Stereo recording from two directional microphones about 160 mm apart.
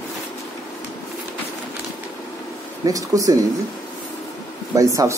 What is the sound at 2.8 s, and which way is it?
Speech, 20° right (ahead or behind).